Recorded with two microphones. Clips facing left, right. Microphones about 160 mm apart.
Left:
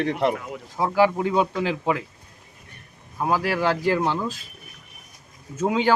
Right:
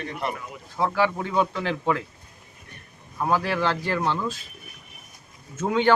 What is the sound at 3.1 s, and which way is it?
Speech, 10° left (ahead or behind).